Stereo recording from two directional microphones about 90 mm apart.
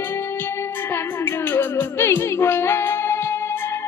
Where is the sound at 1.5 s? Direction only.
25° left (ahead or behind).